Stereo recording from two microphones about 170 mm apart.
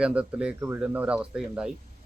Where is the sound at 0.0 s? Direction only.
5° right (ahead or behind).